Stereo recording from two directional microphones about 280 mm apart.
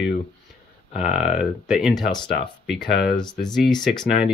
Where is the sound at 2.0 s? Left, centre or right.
Centre.